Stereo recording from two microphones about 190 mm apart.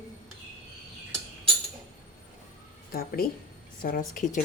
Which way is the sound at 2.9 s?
50° left (ahead or behind).